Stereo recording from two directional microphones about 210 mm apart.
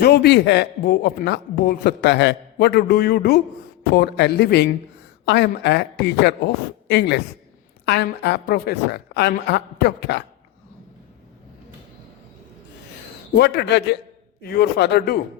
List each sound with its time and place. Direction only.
0.0 s speech: 50° left (ahead or behind)
13.3 s speech: 50° left (ahead or behind)